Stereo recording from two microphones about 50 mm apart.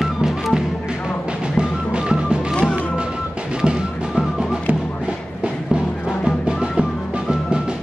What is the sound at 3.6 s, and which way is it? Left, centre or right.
Music, centre.